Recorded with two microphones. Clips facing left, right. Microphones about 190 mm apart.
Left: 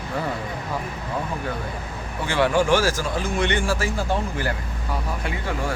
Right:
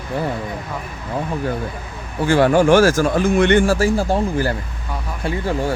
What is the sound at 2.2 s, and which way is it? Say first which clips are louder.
Speech: right 7 dB; 45° right (ahead or behind).